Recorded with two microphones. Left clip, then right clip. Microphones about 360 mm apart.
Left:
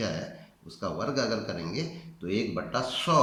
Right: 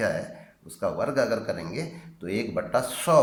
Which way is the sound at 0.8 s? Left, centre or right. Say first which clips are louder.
Right 5 dB; centre.